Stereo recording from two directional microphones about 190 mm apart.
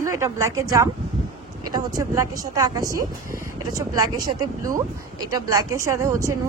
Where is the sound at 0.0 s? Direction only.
15° right (ahead or behind).